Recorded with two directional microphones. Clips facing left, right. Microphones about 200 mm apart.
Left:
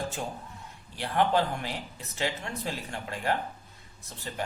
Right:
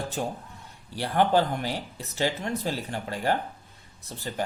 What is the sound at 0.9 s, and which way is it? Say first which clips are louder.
Speech: right 3 dB; 35° right (ahead or behind).